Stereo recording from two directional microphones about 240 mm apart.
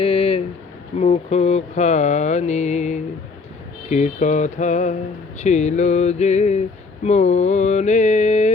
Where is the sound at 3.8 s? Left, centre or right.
Left.